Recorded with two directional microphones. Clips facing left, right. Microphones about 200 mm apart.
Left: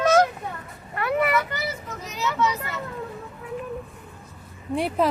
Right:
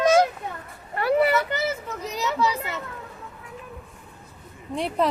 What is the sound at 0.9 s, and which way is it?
A child's voice, 35° right (ahead or behind).